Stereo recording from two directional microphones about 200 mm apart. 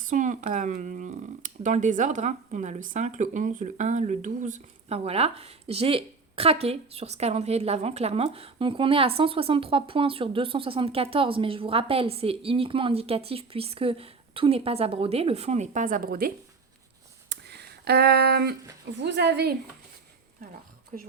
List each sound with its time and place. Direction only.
0.0 s speech: 40° right (ahead or behind)
17.2 s a sound: 55° right (ahead or behind)
18.9 s a woman's voice: 60° right (ahead or behind)
20.9 s speech: 40° right (ahead or behind)